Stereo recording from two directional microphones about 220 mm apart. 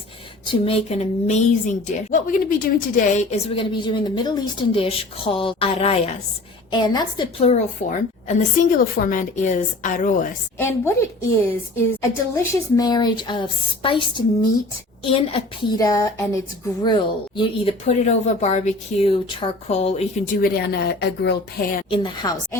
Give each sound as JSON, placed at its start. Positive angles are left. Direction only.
{"t": 0.4, "sound": "a woman's voice", "side_deg": 25}
{"t": 10.6, "sound": "a woman's voice", "side_deg": 10}
{"t": 17.8, "sound": "a woman's voice", "side_deg": 30}
{"t": 20.4, "sound": "speech", "side_deg": 45}
{"t": 21.8, "sound": "a woman's voice", "side_deg": 20}